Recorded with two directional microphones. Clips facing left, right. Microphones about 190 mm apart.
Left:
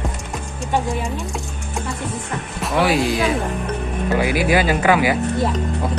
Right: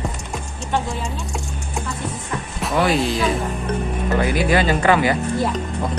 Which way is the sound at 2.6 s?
Centre (ahead or behind).